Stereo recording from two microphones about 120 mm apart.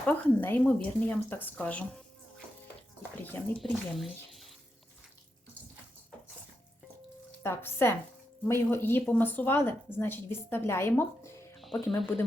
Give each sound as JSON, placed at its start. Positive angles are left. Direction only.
{"t": 0.0, "sound": "speech", "side_deg": 15}
{"t": 3.6, "sound": "speech", "side_deg": 0}
{"t": 7.4, "sound": "speech", "side_deg": 20}
{"t": 11.6, "sound": "speech", "side_deg": 0}